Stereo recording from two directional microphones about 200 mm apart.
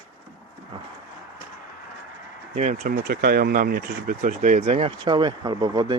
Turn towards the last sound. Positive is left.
turn(degrees=-20)  # may be behind; listen again after turning